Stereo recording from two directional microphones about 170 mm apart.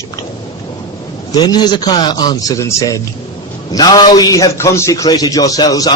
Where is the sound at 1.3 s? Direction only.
25° left (ahead or behind).